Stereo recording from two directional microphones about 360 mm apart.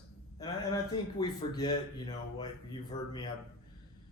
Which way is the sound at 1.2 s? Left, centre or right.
Centre.